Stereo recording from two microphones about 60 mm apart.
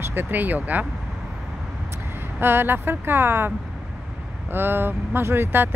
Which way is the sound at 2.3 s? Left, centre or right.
Right.